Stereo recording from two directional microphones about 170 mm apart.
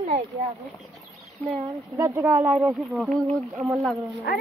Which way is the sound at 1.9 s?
15° right (ahead or behind).